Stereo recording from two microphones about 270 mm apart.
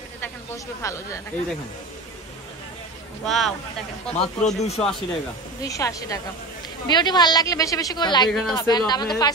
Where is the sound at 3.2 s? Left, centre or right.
Centre.